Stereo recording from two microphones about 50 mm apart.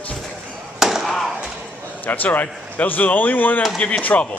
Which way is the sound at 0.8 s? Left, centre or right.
Centre.